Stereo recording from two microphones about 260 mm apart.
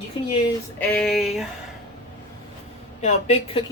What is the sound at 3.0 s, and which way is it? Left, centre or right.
Speech, left.